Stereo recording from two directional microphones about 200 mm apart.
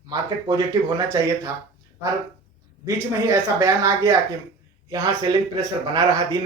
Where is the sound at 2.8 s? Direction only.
15° right (ahead or behind).